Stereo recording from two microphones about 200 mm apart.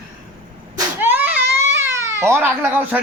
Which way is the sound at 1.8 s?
10° right (ahead or behind).